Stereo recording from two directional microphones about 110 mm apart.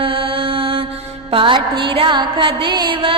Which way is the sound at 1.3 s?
50° right (ahead or behind).